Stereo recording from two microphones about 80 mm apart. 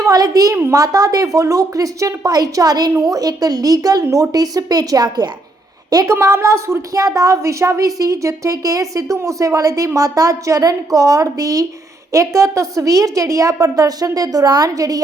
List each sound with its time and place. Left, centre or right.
0.0 s a woman's voice: right
6.1 s a woman's voice: right